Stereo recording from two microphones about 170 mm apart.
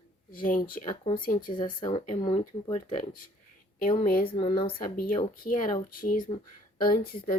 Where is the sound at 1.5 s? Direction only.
25° left (ahead or behind).